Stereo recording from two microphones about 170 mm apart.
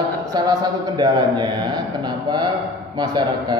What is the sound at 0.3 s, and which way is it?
A man's voice, 25° right (ahead or behind).